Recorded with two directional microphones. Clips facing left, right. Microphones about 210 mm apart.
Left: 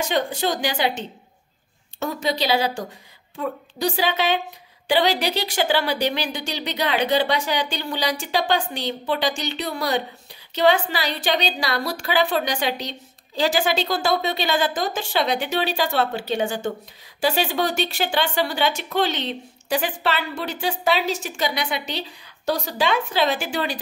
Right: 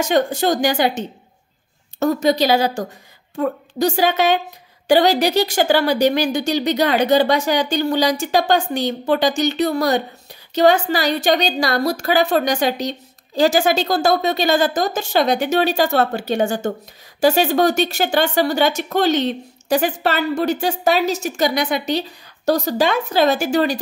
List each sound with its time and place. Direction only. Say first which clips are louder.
0.0 s speech: right 6 dB; 45° right (ahead or behind)